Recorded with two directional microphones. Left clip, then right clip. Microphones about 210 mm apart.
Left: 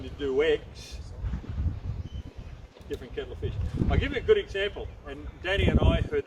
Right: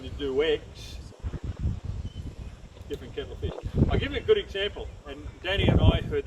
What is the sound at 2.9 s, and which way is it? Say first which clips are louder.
Speech: even; 5° left (ahead or behind).